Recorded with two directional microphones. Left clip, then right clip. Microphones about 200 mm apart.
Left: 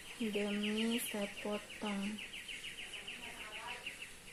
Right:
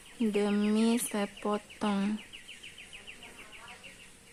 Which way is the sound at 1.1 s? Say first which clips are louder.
Right 7 dB; 40° right (ahead or behind).